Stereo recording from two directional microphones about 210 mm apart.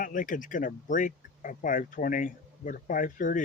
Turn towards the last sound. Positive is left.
turn(degrees=40)  # may be behind; listen again after turning